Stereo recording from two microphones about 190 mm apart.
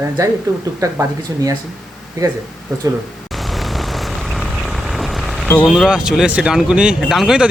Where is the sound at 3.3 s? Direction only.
Centre (ahead or behind).